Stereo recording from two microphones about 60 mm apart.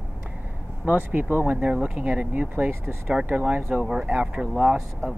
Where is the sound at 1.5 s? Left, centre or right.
Centre.